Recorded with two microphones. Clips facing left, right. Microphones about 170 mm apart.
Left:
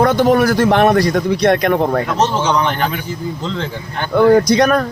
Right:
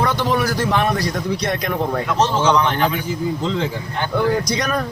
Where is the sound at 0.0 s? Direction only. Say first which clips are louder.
Left 7 dB; 50° left (ahead or behind).